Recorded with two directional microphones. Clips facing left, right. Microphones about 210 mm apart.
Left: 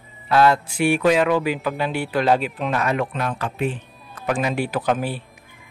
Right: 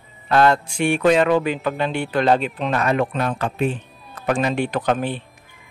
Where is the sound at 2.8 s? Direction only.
30° right (ahead or behind).